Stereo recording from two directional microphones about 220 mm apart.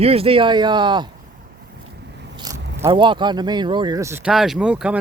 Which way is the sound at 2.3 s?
20° right (ahead or behind).